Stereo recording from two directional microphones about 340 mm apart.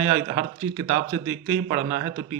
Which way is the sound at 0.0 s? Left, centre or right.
Right.